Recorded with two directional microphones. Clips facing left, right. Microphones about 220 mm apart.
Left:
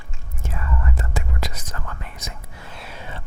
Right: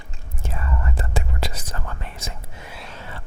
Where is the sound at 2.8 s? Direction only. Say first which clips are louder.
Left 3 dB; 10° left (ahead or behind).